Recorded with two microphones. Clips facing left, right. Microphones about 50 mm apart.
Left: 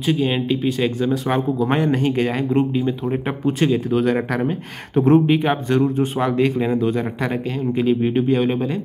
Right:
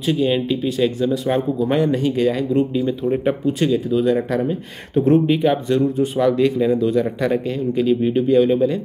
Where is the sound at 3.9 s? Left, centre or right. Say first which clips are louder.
Right 1 dB; left.